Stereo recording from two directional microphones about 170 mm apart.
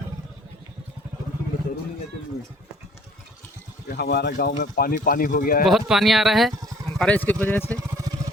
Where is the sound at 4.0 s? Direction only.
70° left (ahead or behind); by 5.6 s 55° left (ahead or behind).